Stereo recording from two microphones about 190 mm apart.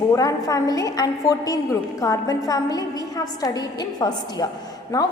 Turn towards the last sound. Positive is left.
turn(degrees=20)  # may be behind; listen again after turning